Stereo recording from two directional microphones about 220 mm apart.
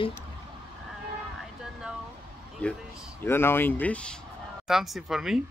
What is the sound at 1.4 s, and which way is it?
Vehicle, centre (ahead or behind).